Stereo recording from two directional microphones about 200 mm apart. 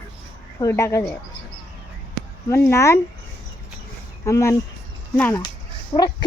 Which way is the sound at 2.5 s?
15° left (ahead or behind).